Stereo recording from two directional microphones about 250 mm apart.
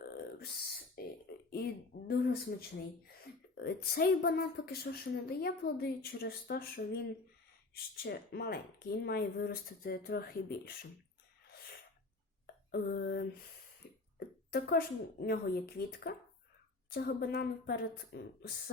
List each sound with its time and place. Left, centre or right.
0.0 s burping: left
1.0 s a sound: left
3.6 s a woman's voice: left
12.7 s a woman's voice: left
14.5 s a woman's voice: left